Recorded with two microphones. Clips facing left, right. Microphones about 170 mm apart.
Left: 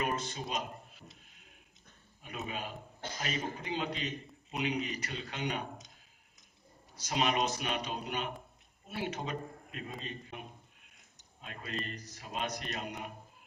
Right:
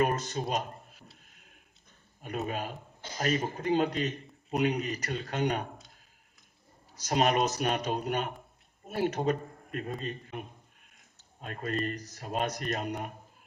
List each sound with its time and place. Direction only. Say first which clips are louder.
0.0 s speech: right 7 dB; 45° right (ahead or behind)
1.3 s a sound: right 1 dB; 50° right (ahead or behind)
2.2 s speech: right 6 dB; 45° right (ahead or behind)
6.9 s a man's voice: right 5 dB; 45° right (ahead or behind)